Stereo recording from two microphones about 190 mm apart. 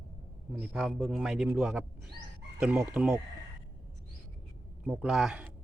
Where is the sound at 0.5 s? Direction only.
Centre (ahead or behind).